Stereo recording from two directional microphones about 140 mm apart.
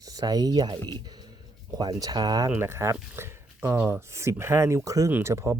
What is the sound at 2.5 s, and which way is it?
Speech, 15° right (ahead or behind).